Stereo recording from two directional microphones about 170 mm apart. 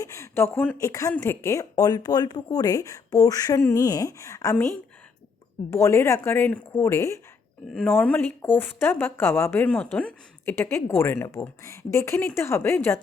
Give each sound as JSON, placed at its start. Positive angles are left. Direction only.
{"t": 0.0, "sound": "speech", "side_deg": 15}
{"t": 5.7, "sound": "a woman's voice", "side_deg": 15}